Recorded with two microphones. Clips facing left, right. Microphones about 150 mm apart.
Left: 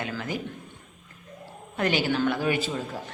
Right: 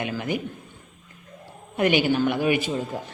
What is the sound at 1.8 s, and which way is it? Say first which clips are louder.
Speech: right 4 dB; 15° right (ahead or behind).